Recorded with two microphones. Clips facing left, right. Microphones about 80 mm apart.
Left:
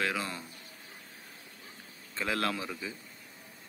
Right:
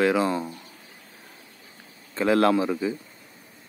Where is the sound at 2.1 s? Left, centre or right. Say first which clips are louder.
Right 12 dB; right.